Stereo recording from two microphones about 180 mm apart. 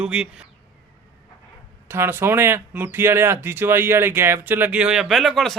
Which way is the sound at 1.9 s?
15° right (ahead or behind).